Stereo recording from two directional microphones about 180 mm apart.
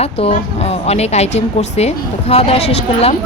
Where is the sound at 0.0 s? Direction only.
35° left (ahead or behind).